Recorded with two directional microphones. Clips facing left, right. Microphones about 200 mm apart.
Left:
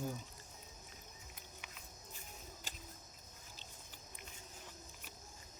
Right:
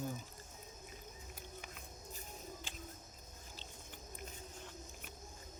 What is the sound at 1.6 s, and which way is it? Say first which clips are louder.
Music: right 4 dB; 40° right (ahead or behind).